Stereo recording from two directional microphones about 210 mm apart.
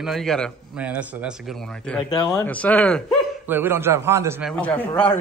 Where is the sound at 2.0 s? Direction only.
20° left (ahead or behind); by 3.2 s 5° left (ahead or behind).